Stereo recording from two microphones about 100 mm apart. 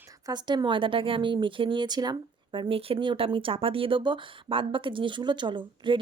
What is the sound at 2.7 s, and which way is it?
Speech, 70° right (ahead or behind).